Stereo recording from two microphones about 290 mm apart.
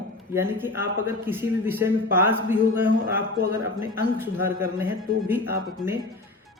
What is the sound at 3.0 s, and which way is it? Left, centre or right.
Speech, right.